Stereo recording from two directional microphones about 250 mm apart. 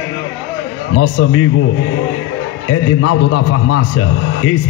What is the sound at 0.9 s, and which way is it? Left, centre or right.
Speech, left.